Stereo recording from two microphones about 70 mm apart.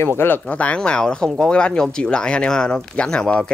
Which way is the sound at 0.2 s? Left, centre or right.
Left.